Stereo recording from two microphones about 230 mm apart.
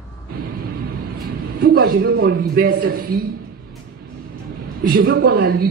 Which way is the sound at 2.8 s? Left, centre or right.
Right.